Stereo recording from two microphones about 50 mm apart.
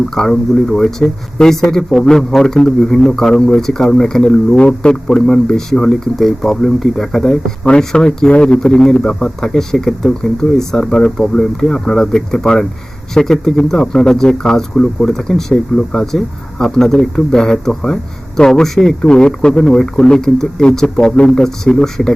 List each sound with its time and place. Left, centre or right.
0.1 s speech: centre
4.3 s speech: left